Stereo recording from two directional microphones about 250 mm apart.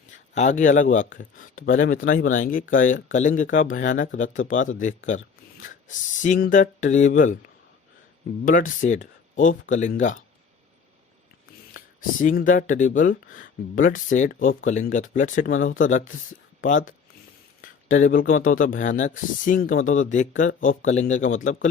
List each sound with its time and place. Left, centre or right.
0.3 s speech: left
6.2 s speech: left
8.4 s speech: left
11.9 s speech: left